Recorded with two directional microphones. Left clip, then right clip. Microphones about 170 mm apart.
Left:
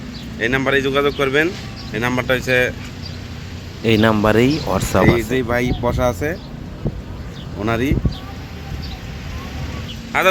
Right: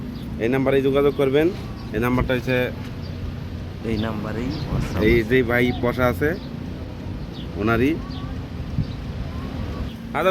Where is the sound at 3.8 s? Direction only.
45° left (ahead or behind).